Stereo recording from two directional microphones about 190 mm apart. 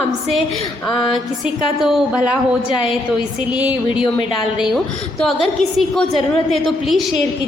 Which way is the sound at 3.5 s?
5° right (ahead or behind).